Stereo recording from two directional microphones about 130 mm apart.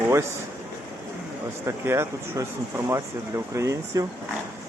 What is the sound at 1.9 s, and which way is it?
Speech, 20° right (ahead or behind).